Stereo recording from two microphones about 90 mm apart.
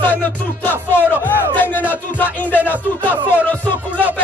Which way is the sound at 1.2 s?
20° left (ahead or behind).